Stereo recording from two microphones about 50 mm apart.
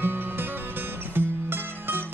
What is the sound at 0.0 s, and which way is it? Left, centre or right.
Music, right.